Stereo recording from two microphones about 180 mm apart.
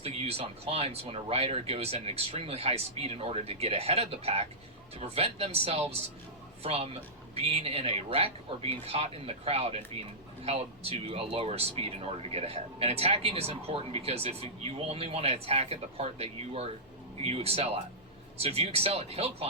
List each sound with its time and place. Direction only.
0.0 s speech: 35° right (ahead or behind)